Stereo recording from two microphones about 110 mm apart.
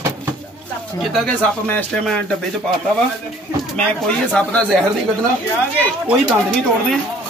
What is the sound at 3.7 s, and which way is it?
Speech, 10° left (ahead or behind).